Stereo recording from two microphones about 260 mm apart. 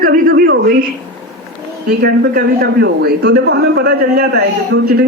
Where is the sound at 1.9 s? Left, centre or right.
Right.